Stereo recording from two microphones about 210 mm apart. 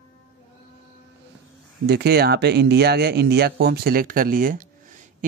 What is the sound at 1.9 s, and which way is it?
Speech, 50° right (ahead or behind).